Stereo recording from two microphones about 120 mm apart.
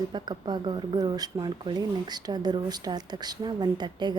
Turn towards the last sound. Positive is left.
turn(degrees=-35)  # may be behind; listen again after turning